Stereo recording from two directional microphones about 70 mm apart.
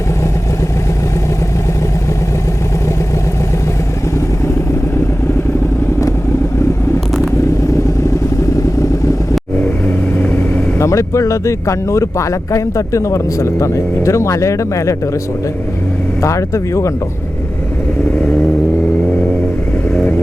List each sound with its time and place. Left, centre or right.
9.6 s speech: left
16.2 s speech: left